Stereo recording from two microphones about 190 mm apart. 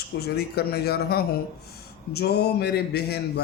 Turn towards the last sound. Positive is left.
turn(degrees=60)  # may be behind; listen again after turning